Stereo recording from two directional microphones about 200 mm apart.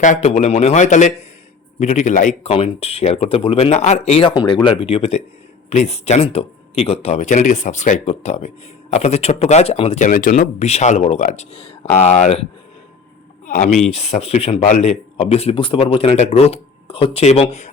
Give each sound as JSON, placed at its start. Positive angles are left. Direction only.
{"t": 0.0, "sound": "speech", "side_deg": 35}
{"t": 13.4, "sound": "a sound", "side_deg": 40}
{"t": 13.9, "sound": "speech", "side_deg": 35}